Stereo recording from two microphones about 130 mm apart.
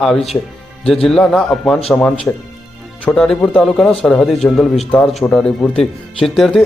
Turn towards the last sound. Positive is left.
turn(degrees=0)  # may be behind; listen again after turning